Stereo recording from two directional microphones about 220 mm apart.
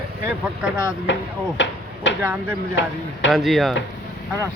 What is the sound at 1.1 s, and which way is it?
Speech, 55° left (ahead or behind).